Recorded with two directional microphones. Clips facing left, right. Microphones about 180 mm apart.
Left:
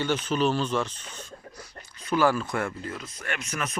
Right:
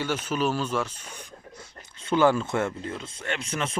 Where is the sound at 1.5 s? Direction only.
25° right (ahead or behind).